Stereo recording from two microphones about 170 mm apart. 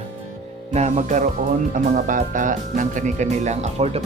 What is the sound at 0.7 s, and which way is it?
Speech, 40° right (ahead or behind).